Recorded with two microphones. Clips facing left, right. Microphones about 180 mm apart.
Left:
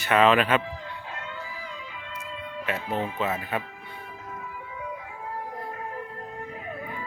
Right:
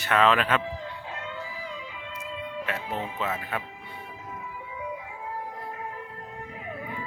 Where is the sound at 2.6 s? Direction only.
Centre (ahead or behind).